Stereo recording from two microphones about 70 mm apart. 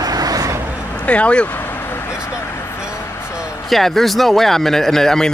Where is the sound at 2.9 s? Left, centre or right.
Left.